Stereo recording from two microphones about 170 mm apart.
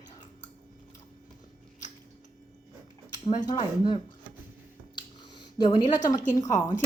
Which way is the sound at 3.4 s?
25° left (ahead or behind).